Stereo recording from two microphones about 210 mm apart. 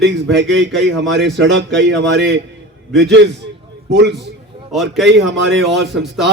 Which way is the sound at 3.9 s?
55° right (ahead or behind).